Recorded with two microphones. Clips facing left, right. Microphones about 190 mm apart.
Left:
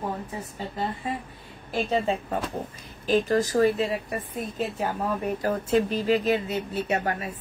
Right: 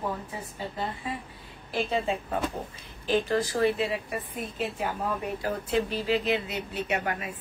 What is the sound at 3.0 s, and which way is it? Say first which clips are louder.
Speech: left 3 dB; 40° left (ahead or behind).